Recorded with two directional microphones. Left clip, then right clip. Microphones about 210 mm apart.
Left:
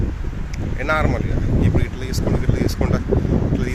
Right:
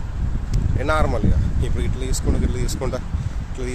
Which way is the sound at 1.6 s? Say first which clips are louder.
Left 5 dB; 10° right (ahead or behind).